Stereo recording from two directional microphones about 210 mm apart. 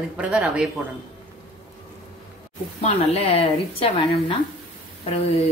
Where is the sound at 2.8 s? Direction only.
30° left (ahead or behind).